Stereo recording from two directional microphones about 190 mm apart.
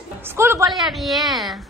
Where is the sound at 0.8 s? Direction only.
Centre (ahead or behind).